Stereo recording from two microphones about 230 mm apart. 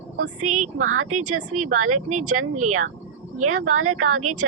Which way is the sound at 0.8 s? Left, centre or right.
Right.